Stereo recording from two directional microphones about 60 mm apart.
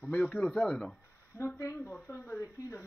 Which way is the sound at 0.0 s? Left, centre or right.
Left.